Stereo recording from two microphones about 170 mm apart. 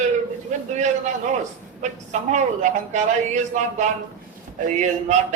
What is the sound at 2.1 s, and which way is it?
A man's voice, 45° right (ahead or behind).